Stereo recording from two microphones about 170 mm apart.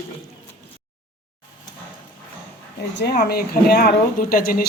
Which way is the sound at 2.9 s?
75° left (ahead or behind).